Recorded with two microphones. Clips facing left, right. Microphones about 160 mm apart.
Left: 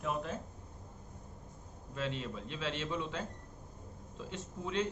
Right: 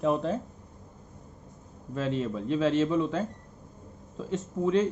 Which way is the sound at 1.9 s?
40° right (ahead or behind).